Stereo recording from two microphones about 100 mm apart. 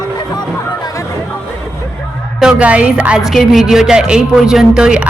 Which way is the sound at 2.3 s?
10° right (ahead or behind).